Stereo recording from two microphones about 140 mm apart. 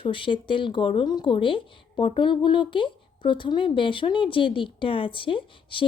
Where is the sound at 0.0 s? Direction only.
35° left (ahead or behind).